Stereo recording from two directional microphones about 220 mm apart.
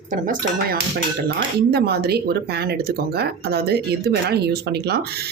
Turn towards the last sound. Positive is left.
turn(degrees=-45)  # may be behind; listen again after turning